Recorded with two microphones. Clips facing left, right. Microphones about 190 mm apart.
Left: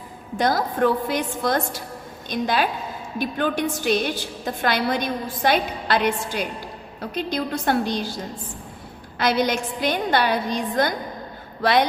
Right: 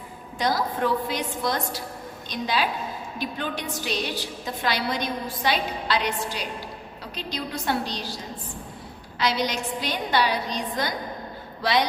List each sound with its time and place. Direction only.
0.3 s a woman's voice: 50° left (ahead or behind)
9.1 s a woman's voice: 50° left (ahead or behind)